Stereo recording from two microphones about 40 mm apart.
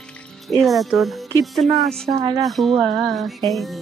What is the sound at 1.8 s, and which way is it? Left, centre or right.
Speech, centre.